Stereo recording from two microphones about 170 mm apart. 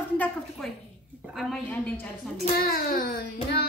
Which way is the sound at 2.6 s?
60° left (ahead or behind).